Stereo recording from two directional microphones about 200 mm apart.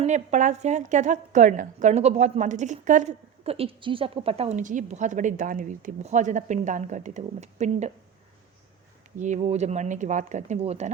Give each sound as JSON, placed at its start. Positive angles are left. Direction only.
{"t": 0.0, "sound": "a woman's voice", "side_deg": -35}
{"t": 9.1, "sound": "a woman's voice", "side_deg": -35}